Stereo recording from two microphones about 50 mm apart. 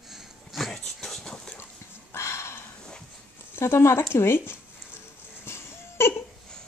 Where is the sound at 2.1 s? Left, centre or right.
Left.